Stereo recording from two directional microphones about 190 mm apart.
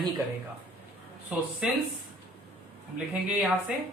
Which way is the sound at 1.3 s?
5° right (ahead or behind).